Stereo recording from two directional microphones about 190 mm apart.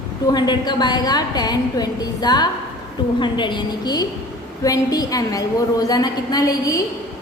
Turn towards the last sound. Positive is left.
turn(degrees=20)  # may be behind; listen again after turning